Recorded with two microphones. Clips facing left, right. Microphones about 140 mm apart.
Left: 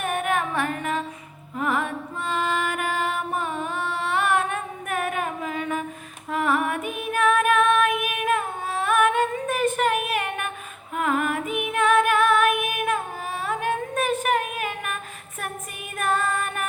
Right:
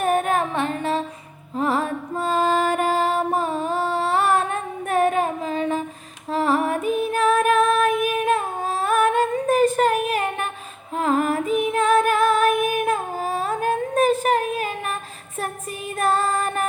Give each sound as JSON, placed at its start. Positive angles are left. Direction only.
{"t": 0.0, "sound": "music", "side_deg": -35}
{"t": 0.5, "sound": "music", "side_deg": -25}
{"t": 16.0, "sound": "child singing", "side_deg": -35}